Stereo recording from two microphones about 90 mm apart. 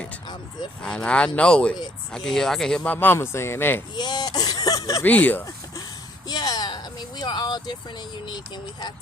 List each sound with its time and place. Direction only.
0.8 s speech: 10° left (ahead or behind)
2.8 s speech: 20° left (ahead or behind)
3.9 s speech: 50° left (ahead or behind)
5.0 s speech: 20° left (ahead or behind)
6.2 s speech: 50° left (ahead or behind)